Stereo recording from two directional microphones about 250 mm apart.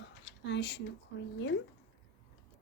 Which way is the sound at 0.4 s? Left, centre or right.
Left.